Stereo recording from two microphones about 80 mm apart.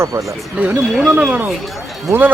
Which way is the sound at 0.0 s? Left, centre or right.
Right.